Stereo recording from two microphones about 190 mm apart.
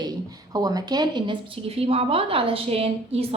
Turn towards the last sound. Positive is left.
turn(degrees=-30)  # may be behind; listen again after turning